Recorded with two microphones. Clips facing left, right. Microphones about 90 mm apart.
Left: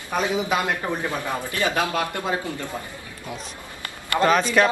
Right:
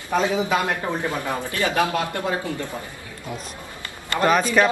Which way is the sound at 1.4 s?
20° left (ahead or behind).